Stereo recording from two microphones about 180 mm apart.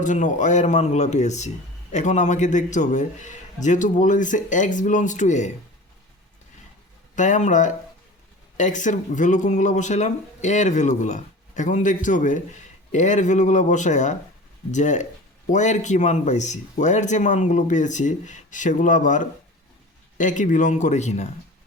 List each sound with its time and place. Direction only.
0.0 s speech: 45° left (ahead or behind)
7.2 s speech: 45° left (ahead or behind)